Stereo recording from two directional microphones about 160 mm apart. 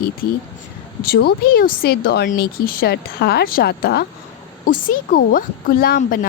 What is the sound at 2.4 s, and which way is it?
Speech, 70° left (ahead or behind).